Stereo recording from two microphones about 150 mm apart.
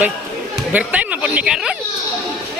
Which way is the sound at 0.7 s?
10° right (ahead or behind).